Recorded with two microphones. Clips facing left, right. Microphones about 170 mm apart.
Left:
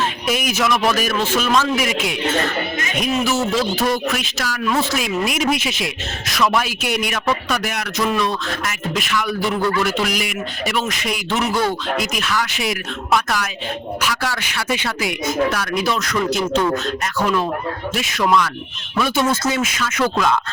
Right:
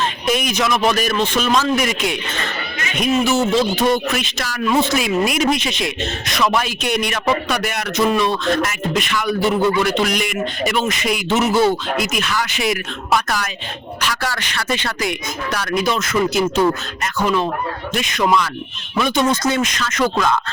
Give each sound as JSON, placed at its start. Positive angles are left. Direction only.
{"t": 0.3, "sound": "speech", "side_deg": 5}
{"t": 9.6, "sound": "a man's voice", "side_deg": -20}
{"t": 9.8, "sound": "speech", "side_deg": 5}